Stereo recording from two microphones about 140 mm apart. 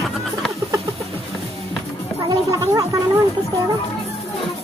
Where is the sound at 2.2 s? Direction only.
25° right (ahead or behind).